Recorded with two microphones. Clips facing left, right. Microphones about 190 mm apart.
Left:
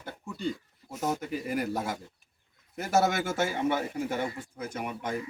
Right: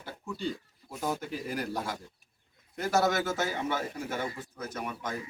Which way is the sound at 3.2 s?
10° left (ahead or behind).